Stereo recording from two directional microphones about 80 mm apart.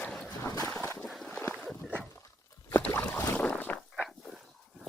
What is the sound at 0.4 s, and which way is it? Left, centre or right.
Boat, left.